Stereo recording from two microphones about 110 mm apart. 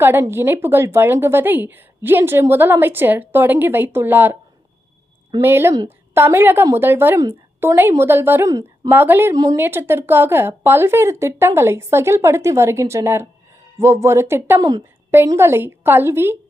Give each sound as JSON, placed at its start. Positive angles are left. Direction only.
{"t": 0.0, "sound": "a woman's voice", "side_deg": -20}
{"t": 5.4, "sound": "a woman's voice", "side_deg": -20}
{"t": 8.9, "sound": "a woman's voice", "side_deg": -20}
{"t": 9.3, "sound": "a woman's voice", "side_deg": -35}
{"t": 9.6, "sound": "a woman's voice", "side_deg": -20}
{"t": 14.6, "sound": "a woman's voice", "side_deg": -35}
{"t": 15.4, "sound": "a woman's voice", "side_deg": -20}